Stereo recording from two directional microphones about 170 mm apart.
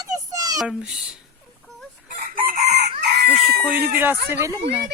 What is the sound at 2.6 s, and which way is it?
Chicken, 80° right.